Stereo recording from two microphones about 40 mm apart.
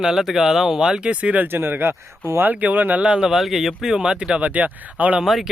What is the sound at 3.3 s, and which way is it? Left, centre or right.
Speech, centre.